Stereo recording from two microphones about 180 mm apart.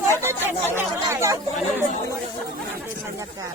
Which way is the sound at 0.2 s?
15° right (ahead or behind).